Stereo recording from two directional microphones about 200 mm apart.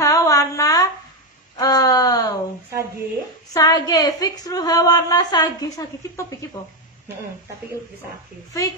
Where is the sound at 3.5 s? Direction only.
20° left (ahead or behind).